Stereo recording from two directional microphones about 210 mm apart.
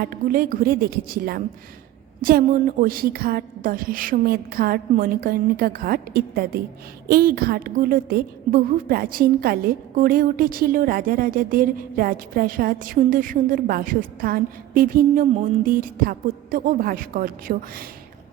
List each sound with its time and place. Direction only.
0.0 s a woman's voice: 40° right (ahead or behind)